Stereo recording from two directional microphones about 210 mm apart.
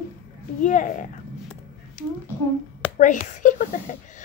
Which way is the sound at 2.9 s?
35° left (ahead or behind).